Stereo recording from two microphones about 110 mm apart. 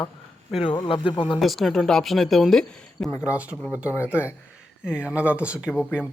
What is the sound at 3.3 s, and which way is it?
Speech, 15° right (ahead or behind).